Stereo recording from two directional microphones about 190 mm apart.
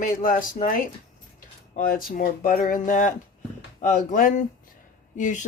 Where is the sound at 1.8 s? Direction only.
45° left (ahead or behind).